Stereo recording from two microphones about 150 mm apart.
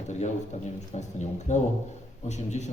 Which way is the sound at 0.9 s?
50° left (ahead or behind).